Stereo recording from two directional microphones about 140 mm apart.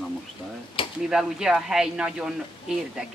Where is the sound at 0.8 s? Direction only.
40° left (ahead or behind).